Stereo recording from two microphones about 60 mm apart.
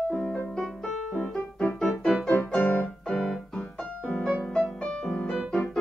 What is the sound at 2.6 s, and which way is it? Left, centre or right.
Keyboard, left.